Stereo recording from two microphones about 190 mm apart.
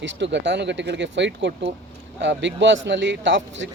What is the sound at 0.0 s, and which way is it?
Speech, 70° right (ahead or behind).